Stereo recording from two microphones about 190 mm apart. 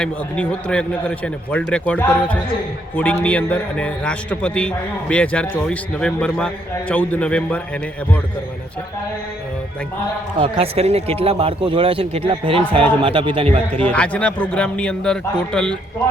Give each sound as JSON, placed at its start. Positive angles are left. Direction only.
{"t": 0.0, "sound": "a man's voice", "side_deg": 5}
{"t": 10.4, "sound": "speech", "side_deg": -30}
{"t": 13.7, "sound": "a man's voice", "side_deg": 5}